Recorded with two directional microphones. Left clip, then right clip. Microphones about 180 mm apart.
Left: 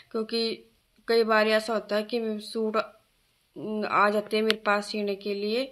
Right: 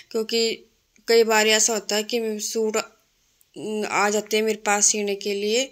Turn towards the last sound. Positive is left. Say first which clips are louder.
# right 6 dB
turn(degrees=-15)  # may be behind; listen again after turning